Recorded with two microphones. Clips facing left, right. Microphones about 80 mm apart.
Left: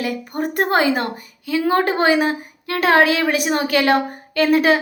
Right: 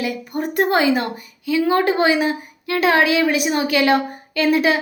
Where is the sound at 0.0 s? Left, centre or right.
Left.